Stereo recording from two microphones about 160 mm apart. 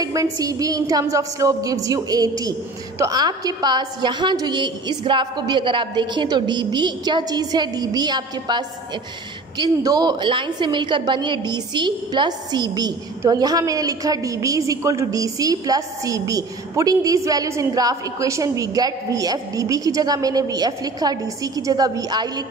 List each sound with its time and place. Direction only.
0.0 s a woman's voice: 20° right (ahead or behind)